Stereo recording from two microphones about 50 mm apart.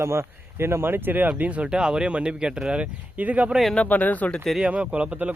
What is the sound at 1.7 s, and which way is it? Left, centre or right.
A man's voice, centre.